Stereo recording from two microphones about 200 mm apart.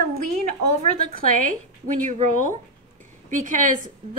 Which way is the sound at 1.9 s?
40° right (ahead or behind).